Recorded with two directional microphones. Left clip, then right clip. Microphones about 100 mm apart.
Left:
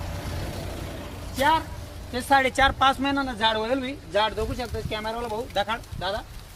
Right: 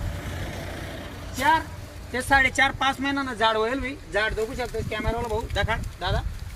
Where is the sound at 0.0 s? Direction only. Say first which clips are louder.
Even; 15° left (ahead or behind); by 1.5 s 30° left (ahead or behind).